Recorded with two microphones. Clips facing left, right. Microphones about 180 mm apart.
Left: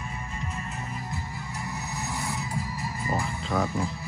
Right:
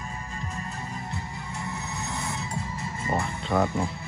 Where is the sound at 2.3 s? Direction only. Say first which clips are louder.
Even; centre (ahead or behind).